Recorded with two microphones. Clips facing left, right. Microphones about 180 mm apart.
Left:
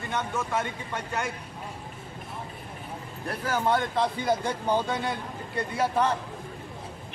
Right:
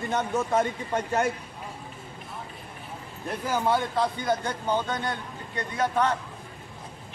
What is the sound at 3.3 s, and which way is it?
Speech, 10° right (ahead or behind).